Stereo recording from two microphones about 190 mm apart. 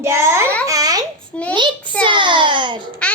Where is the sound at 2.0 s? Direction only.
25° right (ahead or behind).